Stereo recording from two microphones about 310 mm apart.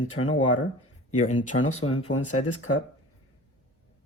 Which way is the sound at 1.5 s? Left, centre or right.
Left.